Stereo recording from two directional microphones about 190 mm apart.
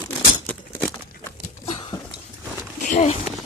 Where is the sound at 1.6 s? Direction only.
30° left (ahead or behind).